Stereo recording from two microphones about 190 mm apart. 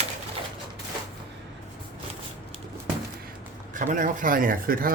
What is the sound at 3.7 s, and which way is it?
Speech, 45° right (ahead or behind).